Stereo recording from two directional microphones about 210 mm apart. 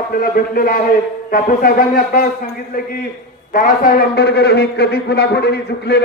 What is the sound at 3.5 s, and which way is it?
A man's voice, 45° left (ahead or behind).